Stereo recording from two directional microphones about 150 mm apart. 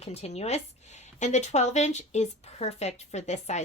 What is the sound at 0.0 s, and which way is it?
Speech, 45° left (ahead or behind).